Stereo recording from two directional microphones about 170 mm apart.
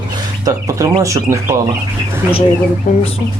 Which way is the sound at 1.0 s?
15° right (ahead or behind).